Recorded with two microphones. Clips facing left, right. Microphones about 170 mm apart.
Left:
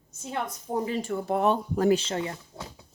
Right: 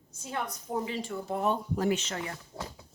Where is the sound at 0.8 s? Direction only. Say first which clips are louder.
Left 5 dB; 45° left (ahead or behind).